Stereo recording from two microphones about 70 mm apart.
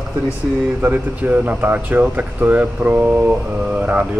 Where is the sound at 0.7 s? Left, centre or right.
Right.